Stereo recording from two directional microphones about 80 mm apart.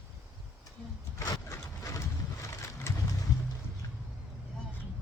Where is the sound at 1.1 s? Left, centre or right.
Left.